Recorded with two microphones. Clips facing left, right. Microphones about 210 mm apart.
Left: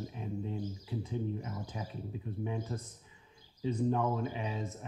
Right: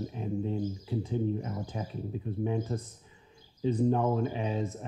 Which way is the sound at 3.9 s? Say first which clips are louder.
Right 5 dB; 40° right (ahead or behind).